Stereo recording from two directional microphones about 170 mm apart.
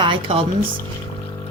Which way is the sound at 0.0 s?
30° right (ahead or behind).